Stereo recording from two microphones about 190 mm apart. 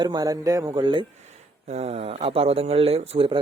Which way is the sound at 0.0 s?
20° right (ahead or behind).